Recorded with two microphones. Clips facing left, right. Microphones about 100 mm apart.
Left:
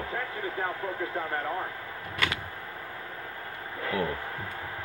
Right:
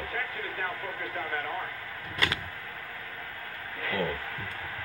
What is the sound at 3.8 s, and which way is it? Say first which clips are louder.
Speech: left 1 dB; 15° left (ahead or behind).